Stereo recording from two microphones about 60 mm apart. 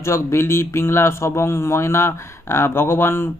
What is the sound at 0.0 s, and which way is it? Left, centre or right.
Speech, left.